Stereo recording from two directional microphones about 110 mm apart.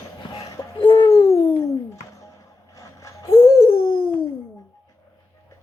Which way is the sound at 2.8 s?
30° left (ahead or behind).